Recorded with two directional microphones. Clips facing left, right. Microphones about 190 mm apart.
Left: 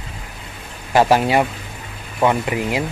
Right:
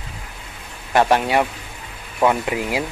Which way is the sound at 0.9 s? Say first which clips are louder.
Left 2 dB; 5° left (ahead or behind).